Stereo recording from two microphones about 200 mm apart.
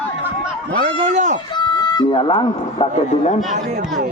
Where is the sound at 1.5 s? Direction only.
20° left (ahead or behind).